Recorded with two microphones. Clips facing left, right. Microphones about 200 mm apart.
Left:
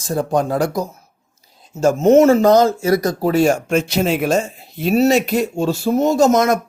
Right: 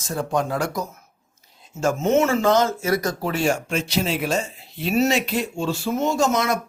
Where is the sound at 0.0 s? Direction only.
35° left (ahead or behind).